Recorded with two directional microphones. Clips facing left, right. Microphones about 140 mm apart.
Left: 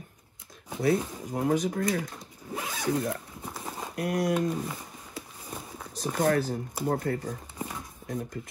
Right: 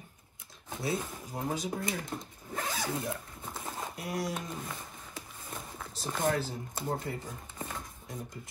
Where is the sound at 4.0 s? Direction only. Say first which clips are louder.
Left 10 dB; 50° left (ahead or behind).